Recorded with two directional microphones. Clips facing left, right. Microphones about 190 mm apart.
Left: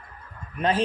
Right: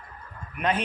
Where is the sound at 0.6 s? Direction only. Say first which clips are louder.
Left 3 dB; 30° left (ahead or behind).